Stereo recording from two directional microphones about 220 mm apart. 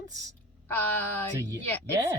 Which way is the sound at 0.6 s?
10° left (ahead or behind).